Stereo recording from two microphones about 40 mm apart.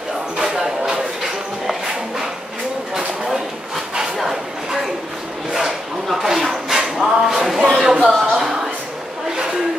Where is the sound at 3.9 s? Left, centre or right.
Centre.